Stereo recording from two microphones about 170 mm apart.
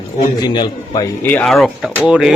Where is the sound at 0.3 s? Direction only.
25° left (ahead or behind).